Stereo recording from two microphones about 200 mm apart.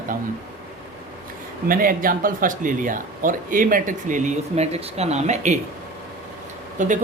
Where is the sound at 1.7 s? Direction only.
45° right (ahead or behind).